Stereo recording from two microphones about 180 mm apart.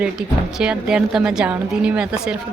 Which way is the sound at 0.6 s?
5° right (ahead or behind).